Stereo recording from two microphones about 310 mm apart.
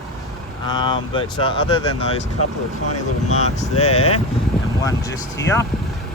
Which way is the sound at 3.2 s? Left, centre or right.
Left.